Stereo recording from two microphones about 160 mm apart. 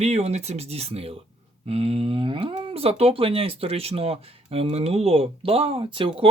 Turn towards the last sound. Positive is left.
turn(degrees=-35)  # may be behind; listen again after turning